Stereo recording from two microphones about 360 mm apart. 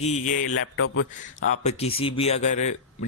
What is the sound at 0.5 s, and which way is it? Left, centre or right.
Speech, left.